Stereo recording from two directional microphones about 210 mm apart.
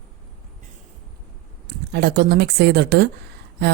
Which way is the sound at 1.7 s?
50° right (ahead or behind).